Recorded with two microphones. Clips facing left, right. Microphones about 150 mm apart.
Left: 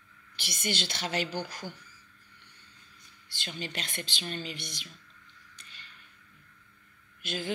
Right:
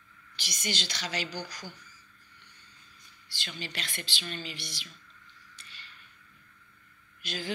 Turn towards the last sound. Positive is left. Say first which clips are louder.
# left 2 dB
turn(degrees=55)  # may be behind; listen again after turning